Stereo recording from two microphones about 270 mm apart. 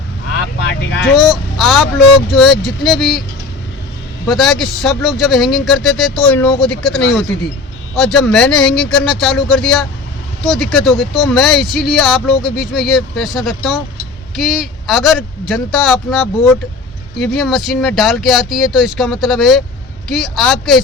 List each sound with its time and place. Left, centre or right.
0.6 s vehicle: left
1.0 s speech: centre
4.3 s speech: centre